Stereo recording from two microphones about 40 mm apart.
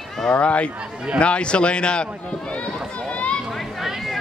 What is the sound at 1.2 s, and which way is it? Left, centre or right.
Speech, left.